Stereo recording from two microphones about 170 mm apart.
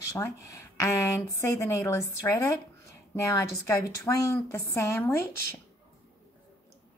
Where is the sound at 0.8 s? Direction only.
15° left (ahead or behind).